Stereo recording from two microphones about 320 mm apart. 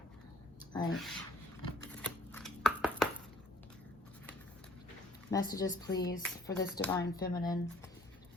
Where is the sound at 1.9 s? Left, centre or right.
Centre.